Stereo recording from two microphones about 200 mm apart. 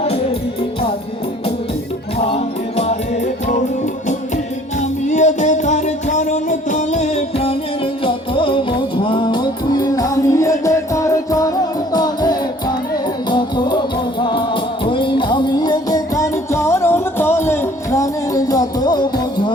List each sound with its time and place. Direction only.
2.1 s music: 30° left (ahead or behind)
4.8 s music: 35° left (ahead or behind); by 19.2 s 20° left (ahead or behind)